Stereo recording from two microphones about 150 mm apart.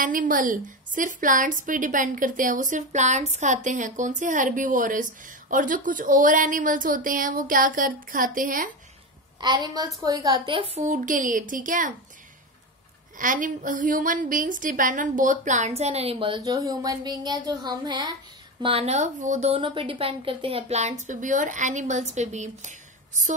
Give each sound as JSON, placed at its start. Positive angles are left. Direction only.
{"t": 0.0, "sound": "a woman's voice", "side_deg": -65}
{"t": 9.4, "sound": "a woman's voice", "side_deg": -30}
{"t": 10.8, "sound": "a woman's voice", "side_deg": -60}
{"t": 13.2, "sound": "a woman's voice", "side_deg": -65}
{"t": 18.6, "sound": "a woman's voice", "side_deg": -40}
{"t": 19.6, "sound": "a woman's voice", "side_deg": -35}
{"t": 21.1, "sound": "a woman's voice", "side_deg": -60}